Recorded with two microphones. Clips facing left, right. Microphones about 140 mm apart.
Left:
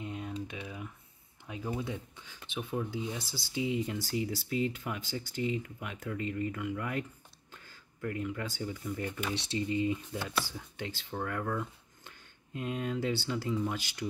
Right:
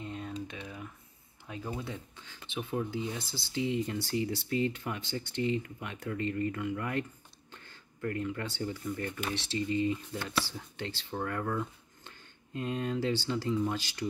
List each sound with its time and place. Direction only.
0.0 s typing: 15° left (ahead or behind)
1.5 s speech: 10° left (ahead or behind)
2.7 s speech: centre (ahead or behind)